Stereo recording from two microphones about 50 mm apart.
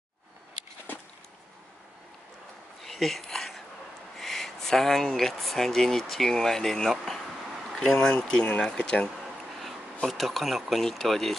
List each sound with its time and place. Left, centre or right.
2.8 s a sound: centre
4.2 s speech: centre
8.3 s speech: centre
10.0 s speech: centre